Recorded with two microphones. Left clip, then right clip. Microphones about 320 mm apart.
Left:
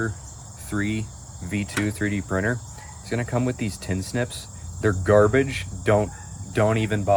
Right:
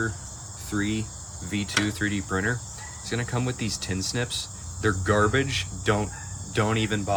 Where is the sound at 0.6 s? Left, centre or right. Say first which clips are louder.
Left 1 dB; centre.